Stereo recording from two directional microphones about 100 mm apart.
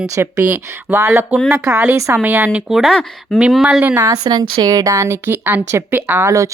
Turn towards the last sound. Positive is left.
turn(degrees=-30)  # may be behind; listen again after turning